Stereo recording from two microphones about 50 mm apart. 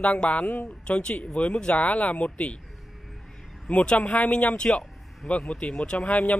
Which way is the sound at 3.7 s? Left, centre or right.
Left.